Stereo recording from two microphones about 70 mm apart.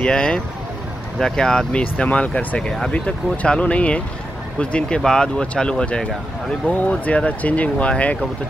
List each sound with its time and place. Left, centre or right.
0.0 s speech: centre